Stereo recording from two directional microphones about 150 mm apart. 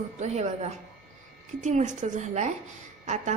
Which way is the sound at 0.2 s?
45° right (ahead or behind).